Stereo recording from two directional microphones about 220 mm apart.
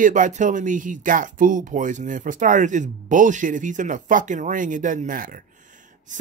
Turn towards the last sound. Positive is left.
turn(degrees=-35)  # may be behind; listen again after turning